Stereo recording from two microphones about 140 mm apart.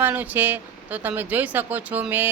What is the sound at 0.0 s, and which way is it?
Speech, 10° right (ahead or behind).